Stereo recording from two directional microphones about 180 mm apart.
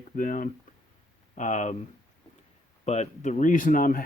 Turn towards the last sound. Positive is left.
turn(degrees=45)  # may be behind; listen again after turning